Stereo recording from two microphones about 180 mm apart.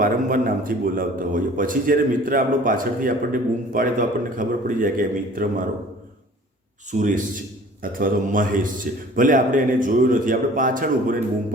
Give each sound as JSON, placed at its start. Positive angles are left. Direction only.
{"t": 0.0, "sound": "a man's voice", "side_deg": -50}
{"t": 6.9, "sound": "a man's voice", "side_deg": -45}